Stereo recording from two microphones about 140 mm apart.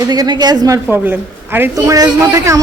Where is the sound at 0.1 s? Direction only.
30° right (ahead or behind).